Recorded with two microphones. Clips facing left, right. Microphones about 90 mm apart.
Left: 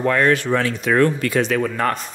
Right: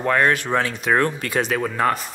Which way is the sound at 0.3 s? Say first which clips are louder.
Left 3 dB; 20° right (ahead or behind).